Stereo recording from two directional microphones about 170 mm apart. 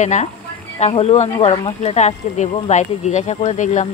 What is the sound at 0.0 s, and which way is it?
Speech, 45° left (ahead or behind).